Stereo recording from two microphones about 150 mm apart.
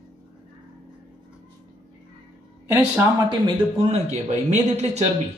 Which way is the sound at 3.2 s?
35° right (ahead or behind).